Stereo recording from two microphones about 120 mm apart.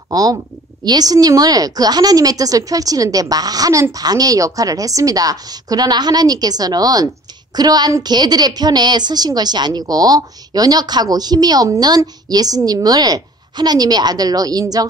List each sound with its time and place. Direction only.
0.1 s a woman's voice: 30° right (ahead or behind)